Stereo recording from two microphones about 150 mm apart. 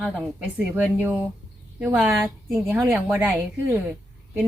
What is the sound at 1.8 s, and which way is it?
Speech, 10° right (ahead or behind).